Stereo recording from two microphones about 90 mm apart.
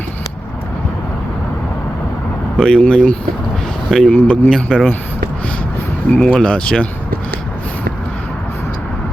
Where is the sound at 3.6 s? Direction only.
5° left (ahead or behind).